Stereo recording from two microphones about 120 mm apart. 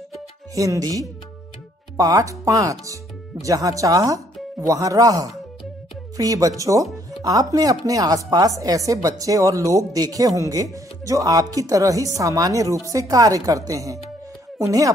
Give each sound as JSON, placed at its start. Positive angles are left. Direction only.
{"t": 0.6, "sound": "speech", "side_deg": -30}